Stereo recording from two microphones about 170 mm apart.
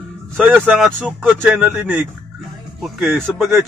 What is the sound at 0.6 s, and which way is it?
Speech, 5° right (ahead or behind).